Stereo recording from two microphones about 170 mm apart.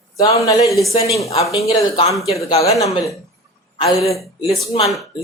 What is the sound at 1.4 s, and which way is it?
Speech, 20° left (ahead or behind).